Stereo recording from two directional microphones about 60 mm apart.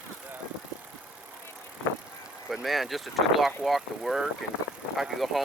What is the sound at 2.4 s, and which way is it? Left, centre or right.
Speech, centre.